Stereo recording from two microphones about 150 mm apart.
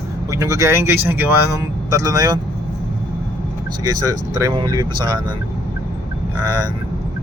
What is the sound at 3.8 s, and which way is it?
Speech, 25° right (ahead or behind).